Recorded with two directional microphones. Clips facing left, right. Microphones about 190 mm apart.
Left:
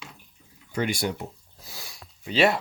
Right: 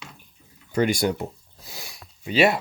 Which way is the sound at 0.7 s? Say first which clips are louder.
Right 5 dB; 45° right (ahead or behind).